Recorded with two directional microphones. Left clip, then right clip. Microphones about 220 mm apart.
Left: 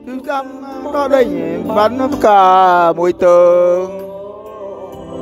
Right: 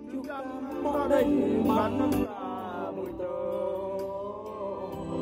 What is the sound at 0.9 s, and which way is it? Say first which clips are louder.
Speech: left 13 dB; 45° left (ahead or behind).